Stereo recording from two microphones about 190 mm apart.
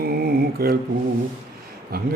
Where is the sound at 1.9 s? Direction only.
55° right (ahead or behind).